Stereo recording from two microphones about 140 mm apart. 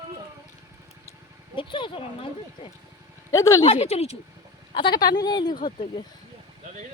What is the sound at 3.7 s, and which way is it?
Speech, 45° left (ahead or behind).